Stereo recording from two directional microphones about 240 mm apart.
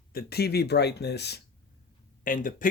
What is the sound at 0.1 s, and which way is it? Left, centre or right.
Speech, left.